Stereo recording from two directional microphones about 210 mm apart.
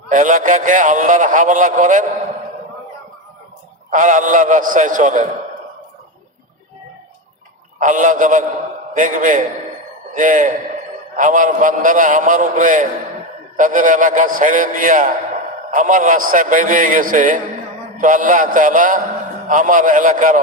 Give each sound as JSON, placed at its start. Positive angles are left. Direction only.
{"t": 0.1, "sound": "a man's voice", "side_deg": -40}
{"t": 3.8, "sound": "a man's voice", "side_deg": -35}
{"t": 7.8, "sound": "a man's voice", "side_deg": -40}